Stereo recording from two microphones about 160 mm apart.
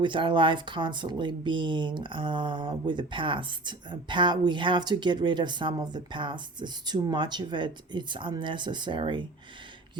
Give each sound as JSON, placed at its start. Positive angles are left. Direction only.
{"t": 0.0, "sound": "speech", "side_deg": -30}